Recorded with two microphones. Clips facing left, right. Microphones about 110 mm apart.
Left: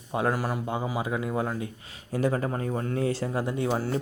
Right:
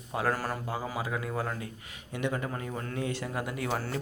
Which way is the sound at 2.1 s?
35° left (ahead or behind).